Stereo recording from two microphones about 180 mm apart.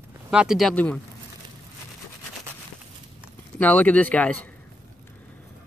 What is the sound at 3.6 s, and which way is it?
Speech, 10° left (ahead or behind).